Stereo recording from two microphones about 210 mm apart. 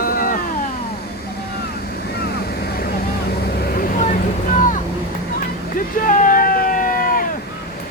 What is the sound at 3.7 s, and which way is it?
Vehicle, 45° left (ahead or behind).